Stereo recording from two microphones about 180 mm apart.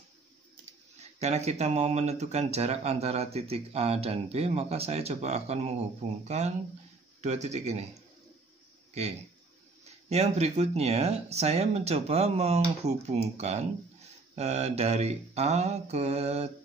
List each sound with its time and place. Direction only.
1.2 s speech: 35° right (ahead or behind)
9.0 s speech: 35° right (ahead or behind)